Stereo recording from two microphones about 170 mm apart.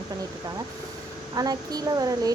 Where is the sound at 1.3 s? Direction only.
20° right (ahead or behind).